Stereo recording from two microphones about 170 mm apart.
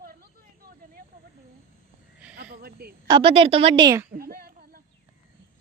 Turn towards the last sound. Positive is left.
turn(degrees=-65)  # may be behind; listen again after turning